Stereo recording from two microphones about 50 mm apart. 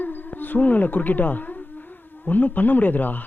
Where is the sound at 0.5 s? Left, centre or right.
Left.